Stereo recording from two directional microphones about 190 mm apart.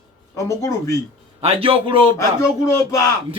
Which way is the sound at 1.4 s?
30° right (ahead or behind).